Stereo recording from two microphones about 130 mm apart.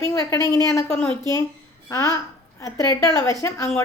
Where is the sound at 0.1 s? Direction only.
25° left (ahead or behind).